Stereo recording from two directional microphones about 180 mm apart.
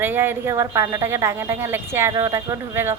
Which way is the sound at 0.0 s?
10° right (ahead or behind).